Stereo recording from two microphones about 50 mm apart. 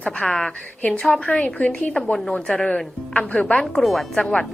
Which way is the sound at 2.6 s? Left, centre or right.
Centre.